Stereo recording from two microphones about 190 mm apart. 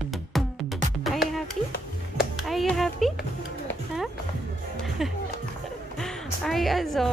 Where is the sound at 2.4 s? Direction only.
Centre (ahead or behind).